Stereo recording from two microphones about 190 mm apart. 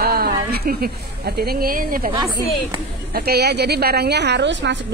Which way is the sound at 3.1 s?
55° right (ahead or behind).